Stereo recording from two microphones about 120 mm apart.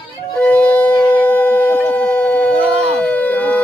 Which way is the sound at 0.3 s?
10° left (ahead or behind).